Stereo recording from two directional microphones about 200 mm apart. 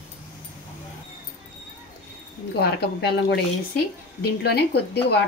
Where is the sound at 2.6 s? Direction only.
55° left (ahead or behind).